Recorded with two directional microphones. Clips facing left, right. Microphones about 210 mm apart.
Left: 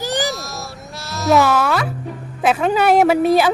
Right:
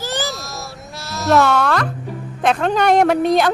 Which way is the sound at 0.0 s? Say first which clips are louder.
Left 3 dB; 15° left (ahead or behind).